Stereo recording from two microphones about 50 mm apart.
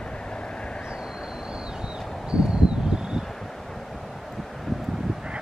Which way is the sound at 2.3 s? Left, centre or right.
Centre.